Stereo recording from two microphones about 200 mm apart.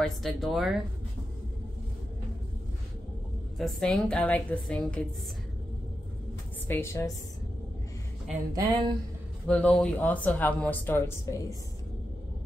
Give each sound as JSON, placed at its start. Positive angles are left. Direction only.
{"t": 0.0, "sound": "a woman's voice", "side_deg": 0}
{"t": 3.5, "sound": "a woman's voice", "side_deg": 0}
{"t": 6.7, "sound": "speech", "side_deg": 15}
{"t": 8.5, "sound": "speech", "side_deg": -20}
{"t": 9.5, "sound": "speech", "side_deg": 5}